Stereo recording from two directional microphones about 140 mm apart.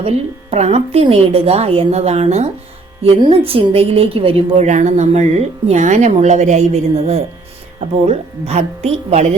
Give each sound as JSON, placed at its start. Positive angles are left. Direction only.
{"t": 0.5, "sound": "a woman's voice", "side_deg": -50}
{"t": 4.6, "sound": "a woman's voice", "side_deg": -55}